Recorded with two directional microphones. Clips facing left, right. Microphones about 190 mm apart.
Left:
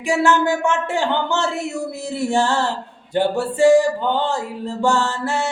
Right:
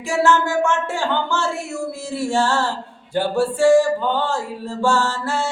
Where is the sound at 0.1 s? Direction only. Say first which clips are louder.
Left 1 dB; 15° left (ahead or behind).